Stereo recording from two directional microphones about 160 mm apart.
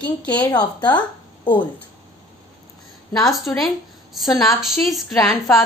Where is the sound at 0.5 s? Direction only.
25° left (ahead or behind).